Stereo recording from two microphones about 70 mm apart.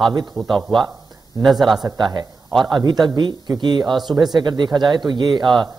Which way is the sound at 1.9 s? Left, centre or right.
Right.